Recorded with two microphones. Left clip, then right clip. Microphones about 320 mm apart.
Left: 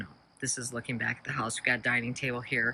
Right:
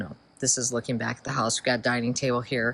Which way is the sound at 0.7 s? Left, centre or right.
Centre.